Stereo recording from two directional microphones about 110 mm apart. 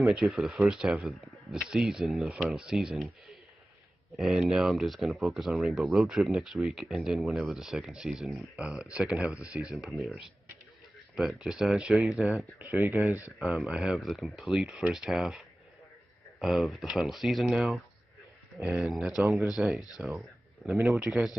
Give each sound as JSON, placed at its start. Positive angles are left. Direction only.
{"t": 0.0, "sound": "speech", "side_deg": -5}
{"t": 4.2, "sound": "speech", "side_deg": 0}
{"t": 12.5, "sound": "speech", "side_deg": -20}
{"t": 13.4, "sound": "speech", "side_deg": 0}